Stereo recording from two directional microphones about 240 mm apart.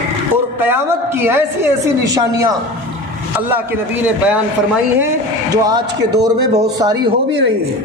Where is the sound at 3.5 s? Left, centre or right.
Centre.